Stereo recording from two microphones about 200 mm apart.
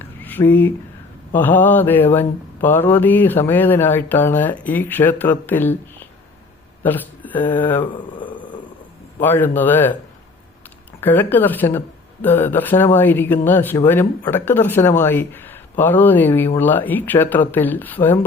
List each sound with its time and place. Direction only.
0.0 s a sound: 10° left (ahead or behind)
1.3 s speech: 10° left (ahead or behind)
6.8 s speech: 10° left (ahead or behind)
7.9 s speech: 25° left (ahead or behind)
9.2 s speech: 10° left (ahead or behind)
11.0 s speech: 10° left (ahead or behind)